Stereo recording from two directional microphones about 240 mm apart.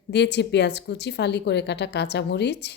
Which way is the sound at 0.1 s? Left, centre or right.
Left.